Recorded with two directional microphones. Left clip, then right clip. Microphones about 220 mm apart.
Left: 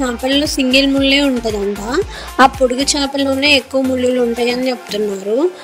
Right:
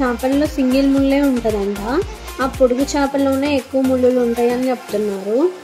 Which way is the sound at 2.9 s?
40° left (ahead or behind).